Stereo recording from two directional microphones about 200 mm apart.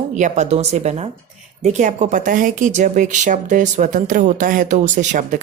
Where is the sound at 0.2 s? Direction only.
35° right (ahead or behind).